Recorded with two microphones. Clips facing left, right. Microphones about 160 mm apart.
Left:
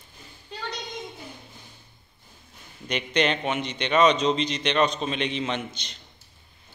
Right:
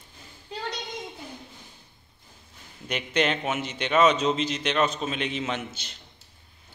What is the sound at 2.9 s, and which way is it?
A man's voice, 5° right (ahead or behind).